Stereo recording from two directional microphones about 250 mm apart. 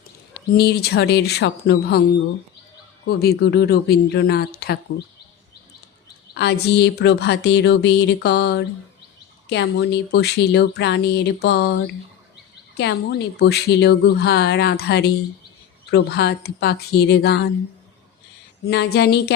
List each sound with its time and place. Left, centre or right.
0.5 s a woman's voice: left
3.1 s a woman's voice: left
6.3 s a sound: left
9.5 s a woman's voice: left
12.7 s a woman's voice: left
18.6 s a woman's voice: left